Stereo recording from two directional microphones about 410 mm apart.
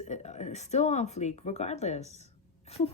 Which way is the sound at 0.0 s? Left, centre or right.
Centre.